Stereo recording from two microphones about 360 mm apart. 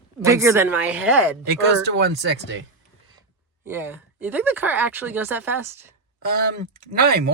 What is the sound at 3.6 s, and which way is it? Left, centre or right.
Speech, centre.